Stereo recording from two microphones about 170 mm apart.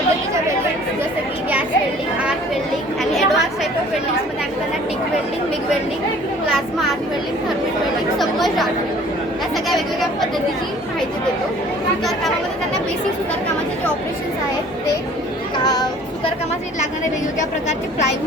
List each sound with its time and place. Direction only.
3.0 s chatter: centre (ahead or behind)
8.2 s chatter: centre (ahead or behind)
9.6 s chatter: centre (ahead or behind)
15.7 s child singing: 25° left (ahead or behind)